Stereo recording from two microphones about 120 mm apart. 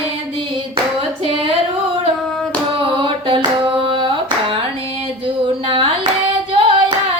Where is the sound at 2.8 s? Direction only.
45° right (ahead or behind).